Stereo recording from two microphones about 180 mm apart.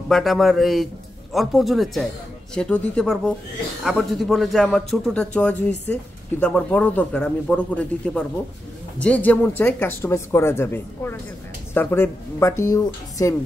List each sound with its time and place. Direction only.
0.1 s a man's voice: centre (ahead or behind); by 13.4 s 15° left (ahead or behind)